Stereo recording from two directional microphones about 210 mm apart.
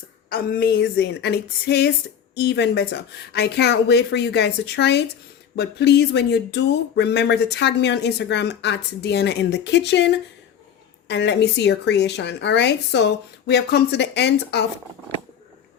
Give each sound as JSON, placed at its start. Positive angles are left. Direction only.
{"t": 0.3, "sound": "a woman's voice", "side_deg": 45}